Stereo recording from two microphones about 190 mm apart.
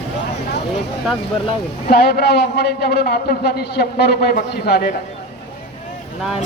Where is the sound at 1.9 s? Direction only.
55° left (ahead or behind).